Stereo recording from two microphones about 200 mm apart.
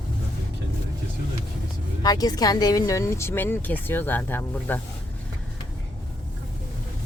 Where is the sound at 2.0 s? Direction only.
20° left (ahead or behind).